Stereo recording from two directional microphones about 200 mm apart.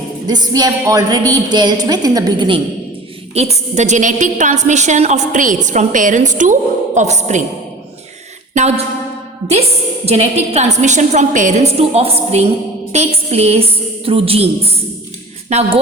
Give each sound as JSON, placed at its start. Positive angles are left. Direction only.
{"t": 0.3, "sound": "a woman's voice", "side_deg": -20}
{"t": 3.3, "sound": "a woman's voice", "side_deg": -30}
{"t": 10.1, "sound": "a woman's voice", "side_deg": -30}